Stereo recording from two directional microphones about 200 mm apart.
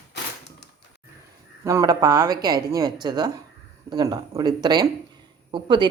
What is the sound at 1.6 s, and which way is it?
Speech, 15° right (ahead or behind).